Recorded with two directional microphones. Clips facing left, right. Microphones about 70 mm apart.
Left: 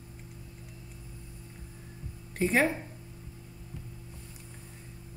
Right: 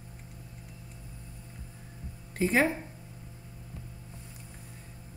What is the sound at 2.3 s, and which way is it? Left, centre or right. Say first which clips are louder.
Speech: even; centre.